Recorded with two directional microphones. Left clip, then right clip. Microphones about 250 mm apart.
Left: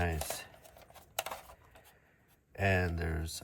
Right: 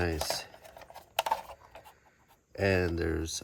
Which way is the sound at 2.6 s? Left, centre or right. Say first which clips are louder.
Right 4 dB; right.